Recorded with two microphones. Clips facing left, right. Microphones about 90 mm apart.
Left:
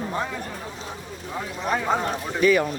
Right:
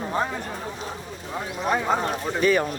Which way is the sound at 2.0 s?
35° right (ahead or behind).